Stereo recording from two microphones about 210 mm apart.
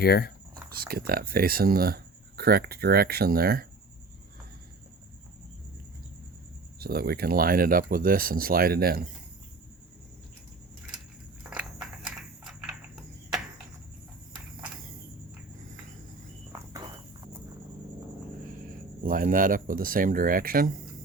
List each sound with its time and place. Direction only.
0.0 s speech: 50° left (ahead or behind)
0.7 s speech: 45° right (ahead or behind)
6.7 s speech: 45° right (ahead or behind)
11.4 s a sound: 5° right (ahead or behind)
19.0 s speech: 40° right (ahead or behind)